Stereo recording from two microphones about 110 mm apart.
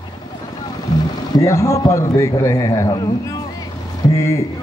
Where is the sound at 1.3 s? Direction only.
30° left (ahead or behind).